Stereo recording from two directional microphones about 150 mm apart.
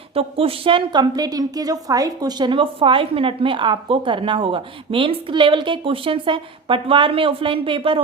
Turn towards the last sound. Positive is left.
turn(degrees=-35)  # may be behind; listen again after turning